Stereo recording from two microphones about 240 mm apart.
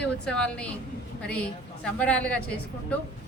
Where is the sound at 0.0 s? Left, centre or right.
Centre.